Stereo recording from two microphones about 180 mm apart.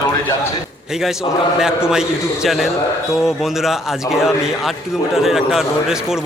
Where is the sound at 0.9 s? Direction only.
Centre (ahead or behind).